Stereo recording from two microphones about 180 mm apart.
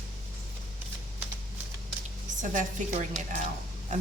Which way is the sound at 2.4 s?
45° right (ahead or behind).